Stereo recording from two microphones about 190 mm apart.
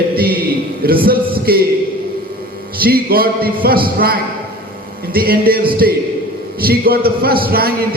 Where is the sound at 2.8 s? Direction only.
50° right (ahead or behind).